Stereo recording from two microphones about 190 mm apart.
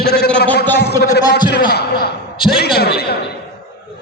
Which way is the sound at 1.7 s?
55° left (ahead or behind).